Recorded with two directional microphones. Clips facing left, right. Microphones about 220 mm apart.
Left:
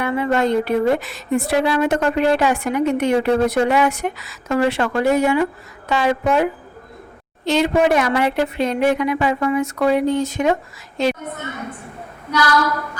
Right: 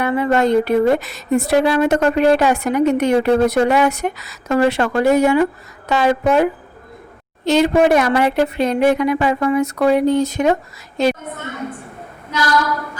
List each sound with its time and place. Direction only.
0.0 s a woman's voice: 40° right (ahead or behind)
7.4 s a woman's voice: 40° right (ahead or behind)